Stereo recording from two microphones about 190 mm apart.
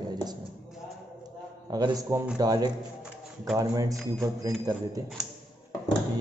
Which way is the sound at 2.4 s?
20° right (ahead or behind).